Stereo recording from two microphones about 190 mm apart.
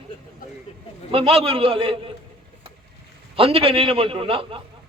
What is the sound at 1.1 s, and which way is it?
A man's voice, 30° right (ahead or behind).